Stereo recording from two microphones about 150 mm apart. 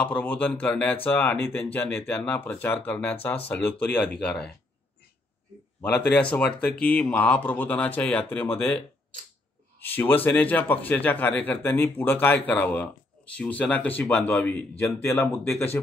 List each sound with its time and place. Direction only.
0.0 s a man's voice: 10° left (ahead or behind)
6.3 s a man's voice: 5° left (ahead or behind)